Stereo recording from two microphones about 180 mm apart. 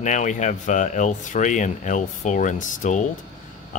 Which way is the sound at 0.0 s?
45° left (ahead or behind).